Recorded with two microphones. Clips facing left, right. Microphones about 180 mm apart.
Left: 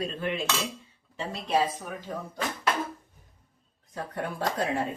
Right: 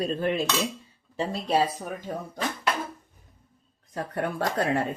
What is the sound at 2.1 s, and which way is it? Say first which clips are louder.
Speech: right 2 dB; 45° right (ahead or behind).